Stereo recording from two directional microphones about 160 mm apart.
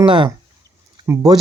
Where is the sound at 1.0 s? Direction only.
20° right (ahead or behind).